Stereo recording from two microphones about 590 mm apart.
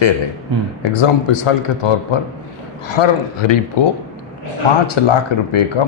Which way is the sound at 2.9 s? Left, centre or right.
Left.